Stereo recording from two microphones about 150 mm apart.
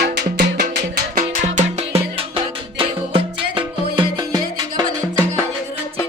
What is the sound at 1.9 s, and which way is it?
Music, 40° right (ahead or behind).